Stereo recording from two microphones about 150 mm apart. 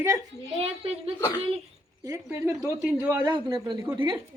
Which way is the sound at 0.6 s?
45° right (ahead or behind).